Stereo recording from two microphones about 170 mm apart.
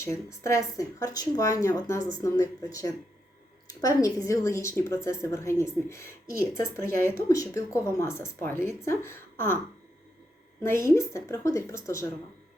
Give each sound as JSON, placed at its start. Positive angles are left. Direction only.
{"t": 0.0, "sound": "speech", "side_deg": 15}
{"t": 10.6, "sound": "speech", "side_deg": 15}